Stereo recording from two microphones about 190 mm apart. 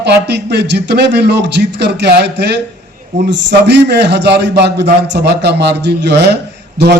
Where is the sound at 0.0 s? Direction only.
65° right (ahead or behind).